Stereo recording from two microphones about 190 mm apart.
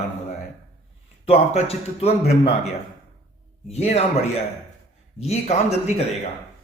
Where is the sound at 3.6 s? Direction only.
35° left (ahead or behind).